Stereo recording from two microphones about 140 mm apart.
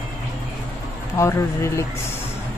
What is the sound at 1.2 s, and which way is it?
Speech, 20° left (ahead or behind).